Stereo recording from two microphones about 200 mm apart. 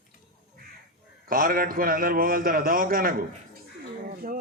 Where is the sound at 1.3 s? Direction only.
45° right (ahead or behind).